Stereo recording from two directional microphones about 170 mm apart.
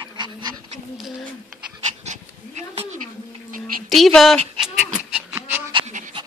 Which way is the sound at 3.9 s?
Centre (ahead or behind).